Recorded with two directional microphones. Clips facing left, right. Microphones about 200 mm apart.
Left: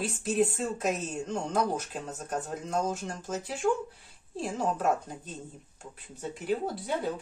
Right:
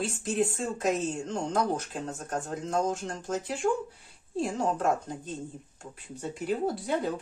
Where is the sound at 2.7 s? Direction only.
5° left (ahead or behind).